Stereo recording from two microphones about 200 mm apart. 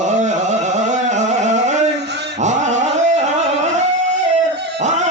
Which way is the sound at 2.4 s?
35° right (ahead or behind).